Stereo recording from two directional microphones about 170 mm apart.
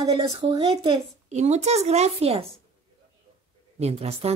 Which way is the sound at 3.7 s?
35° right (ahead or behind).